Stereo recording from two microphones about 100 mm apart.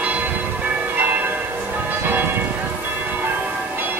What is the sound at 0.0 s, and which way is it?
Change ringing, 15° right (ahead or behind).